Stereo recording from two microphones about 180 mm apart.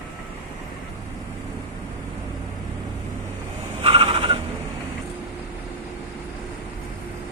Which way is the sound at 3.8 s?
30° right (ahead or behind).